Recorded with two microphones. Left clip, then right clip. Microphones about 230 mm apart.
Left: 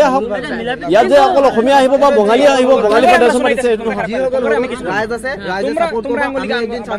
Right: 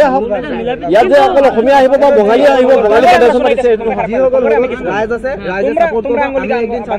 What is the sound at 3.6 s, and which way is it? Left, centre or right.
Speech, left.